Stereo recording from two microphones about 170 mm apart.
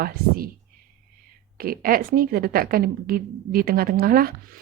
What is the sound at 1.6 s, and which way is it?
A woman's voice, 60° right (ahead or behind).